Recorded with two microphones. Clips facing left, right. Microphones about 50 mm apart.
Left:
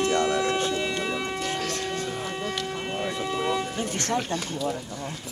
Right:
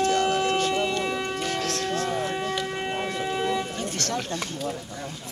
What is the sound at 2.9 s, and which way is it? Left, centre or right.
Civil defense siren, centre.